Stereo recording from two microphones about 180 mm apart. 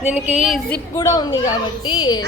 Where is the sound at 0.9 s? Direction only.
20° left (ahead or behind).